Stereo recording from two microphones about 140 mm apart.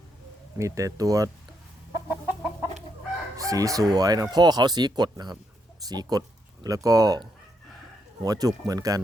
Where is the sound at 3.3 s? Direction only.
25° right (ahead or behind).